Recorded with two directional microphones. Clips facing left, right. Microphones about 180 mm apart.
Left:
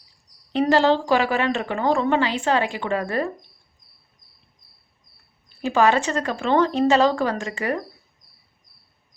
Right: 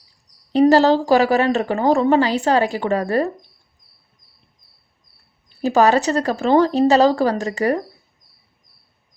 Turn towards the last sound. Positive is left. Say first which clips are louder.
# right 6 dB
turn(degrees=-40)  # may be behind; listen again after turning